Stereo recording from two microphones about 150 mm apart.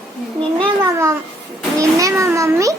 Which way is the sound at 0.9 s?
20° right (ahead or behind).